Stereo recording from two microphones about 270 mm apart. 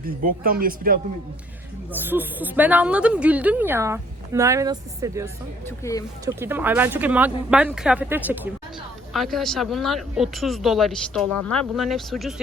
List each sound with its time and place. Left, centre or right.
0.0 s speech: right
1.9 s speech: centre
5.6 s speech: centre
6.2 s speech: centre